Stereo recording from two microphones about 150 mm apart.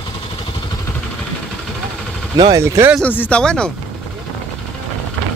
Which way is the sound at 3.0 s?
10° left (ahead or behind).